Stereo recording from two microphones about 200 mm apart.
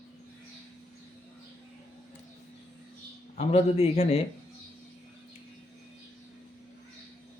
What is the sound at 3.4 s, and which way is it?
Speech, 30° left (ahead or behind).